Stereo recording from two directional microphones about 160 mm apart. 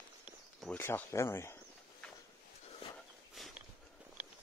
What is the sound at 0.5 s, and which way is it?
Speech, 10° left (ahead or behind).